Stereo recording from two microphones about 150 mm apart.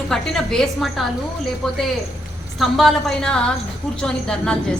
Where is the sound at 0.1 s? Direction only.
5° left (ahead or behind).